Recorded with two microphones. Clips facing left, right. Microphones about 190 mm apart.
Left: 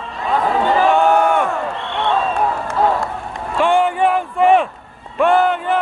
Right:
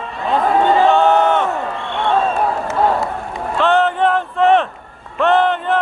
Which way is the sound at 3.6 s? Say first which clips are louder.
Even; 10° left (ahead or behind).